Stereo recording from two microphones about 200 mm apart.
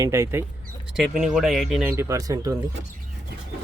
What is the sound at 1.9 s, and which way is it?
Speech, 15° right (ahead or behind).